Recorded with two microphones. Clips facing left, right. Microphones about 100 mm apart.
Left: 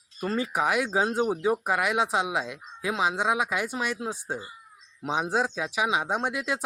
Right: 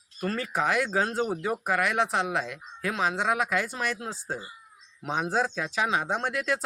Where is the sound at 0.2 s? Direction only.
20° left (ahead or behind).